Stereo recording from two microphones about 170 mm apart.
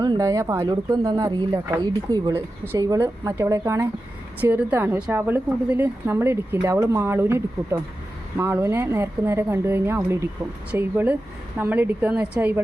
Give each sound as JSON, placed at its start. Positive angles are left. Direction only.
{"t": 0.0, "sound": "speech", "side_deg": -20}